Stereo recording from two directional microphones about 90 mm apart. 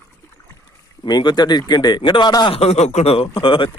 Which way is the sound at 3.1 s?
80° left.